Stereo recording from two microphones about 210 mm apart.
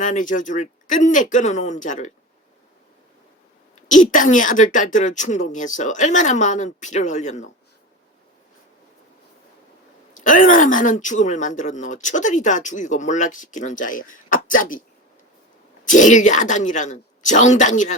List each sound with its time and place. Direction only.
0.0 s speech: 40° left (ahead or behind)
3.8 s speech: 35° left (ahead or behind)
10.2 s speech: 40° left (ahead or behind)